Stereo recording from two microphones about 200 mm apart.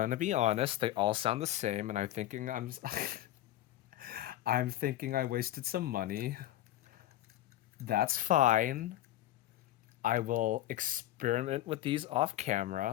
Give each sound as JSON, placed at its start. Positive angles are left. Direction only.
{"t": 0.0, "sound": "speech", "side_deg": -40}
{"t": 7.9, "sound": "speech", "side_deg": -50}
{"t": 10.0, "sound": "speech", "side_deg": -40}